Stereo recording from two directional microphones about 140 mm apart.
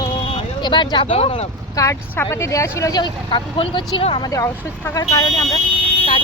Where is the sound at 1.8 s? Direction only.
25° left (ahead or behind); by 4.2 s 40° left (ahead or behind).